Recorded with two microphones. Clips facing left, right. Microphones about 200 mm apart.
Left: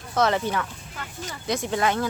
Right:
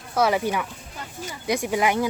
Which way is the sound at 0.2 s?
10° right (ahead or behind).